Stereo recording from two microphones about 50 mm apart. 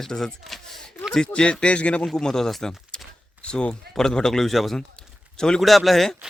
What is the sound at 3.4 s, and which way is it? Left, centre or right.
A man's voice, left.